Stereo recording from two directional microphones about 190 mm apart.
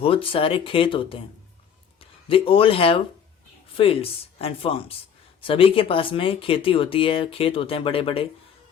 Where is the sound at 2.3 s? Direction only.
30° left (ahead or behind).